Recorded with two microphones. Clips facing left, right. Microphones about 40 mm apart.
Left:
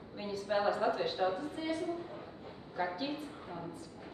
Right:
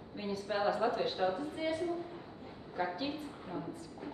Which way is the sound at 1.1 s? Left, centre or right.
Centre.